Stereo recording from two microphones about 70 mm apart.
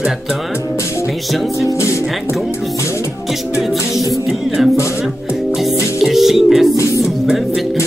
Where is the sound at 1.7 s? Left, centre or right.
Left.